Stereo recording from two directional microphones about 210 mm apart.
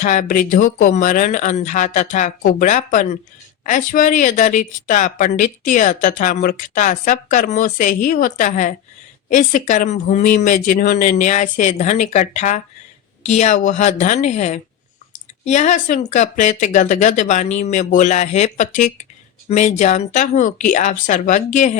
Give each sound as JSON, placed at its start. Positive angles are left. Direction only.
{"t": 0.0, "sound": "speech", "side_deg": 35}